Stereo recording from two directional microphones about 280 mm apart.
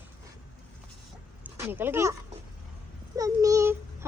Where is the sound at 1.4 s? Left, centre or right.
Centre.